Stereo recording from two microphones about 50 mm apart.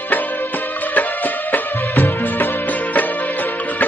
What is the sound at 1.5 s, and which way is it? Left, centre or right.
Music, left.